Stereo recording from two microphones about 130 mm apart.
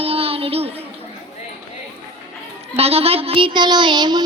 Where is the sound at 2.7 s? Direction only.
50° right (ahead or behind); by 4.2 s 35° right (ahead or behind).